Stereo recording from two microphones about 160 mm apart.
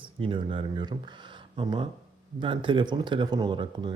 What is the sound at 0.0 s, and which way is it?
Speech, 35° right (ahead or behind).